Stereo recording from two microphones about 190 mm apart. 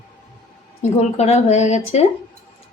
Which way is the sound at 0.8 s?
35° left (ahead or behind).